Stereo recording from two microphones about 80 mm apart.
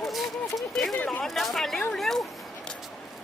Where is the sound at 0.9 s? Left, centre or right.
Centre.